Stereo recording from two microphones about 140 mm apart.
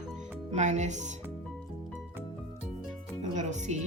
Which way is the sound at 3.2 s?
60° right (ahead or behind).